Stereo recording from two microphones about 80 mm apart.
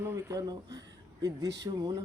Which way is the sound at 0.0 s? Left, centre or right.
Right.